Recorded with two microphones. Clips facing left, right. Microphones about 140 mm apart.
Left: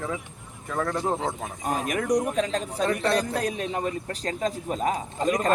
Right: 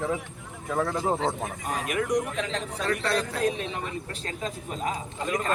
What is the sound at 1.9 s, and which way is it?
A man's voice, 35° left (ahead or behind).